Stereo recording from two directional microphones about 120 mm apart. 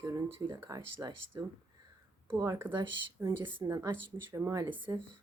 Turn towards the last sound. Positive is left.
turn(degrees=-25)  # may be behind; listen again after turning